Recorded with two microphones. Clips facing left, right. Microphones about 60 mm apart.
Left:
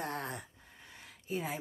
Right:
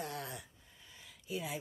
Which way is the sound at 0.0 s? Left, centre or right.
Left.